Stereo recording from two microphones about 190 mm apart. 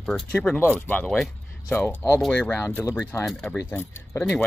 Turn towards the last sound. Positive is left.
turn(degrees=10)  # may be behind; listen again after turning